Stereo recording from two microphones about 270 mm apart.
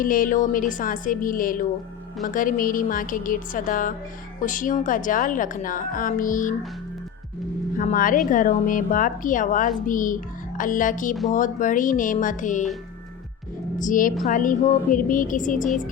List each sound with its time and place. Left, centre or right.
0.0 s a woman's voice: left
7.8 s a woman's voice: left
13.7 s a woman's voice: left